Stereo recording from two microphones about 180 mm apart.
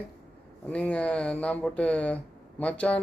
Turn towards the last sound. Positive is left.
turn(degrees=10)  # may be behind; listen again after turning